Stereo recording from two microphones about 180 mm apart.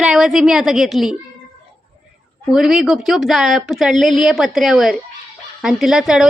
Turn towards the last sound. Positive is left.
turn(degrees=-5)  # may be behind; listen again after turning